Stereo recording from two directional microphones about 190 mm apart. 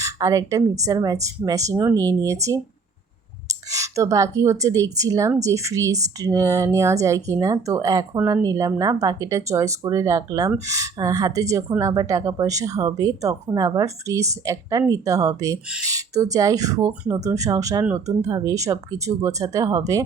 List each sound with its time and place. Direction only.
0.0 s speech: 15° right (ahead or behind)
3.7 s speech: 15° right (ahead or behind)